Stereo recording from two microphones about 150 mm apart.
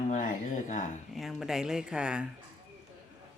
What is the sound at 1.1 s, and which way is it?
Speech, centre (ahead or behind).